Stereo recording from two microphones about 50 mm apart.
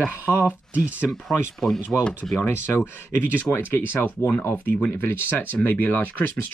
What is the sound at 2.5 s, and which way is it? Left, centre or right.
Speech, left.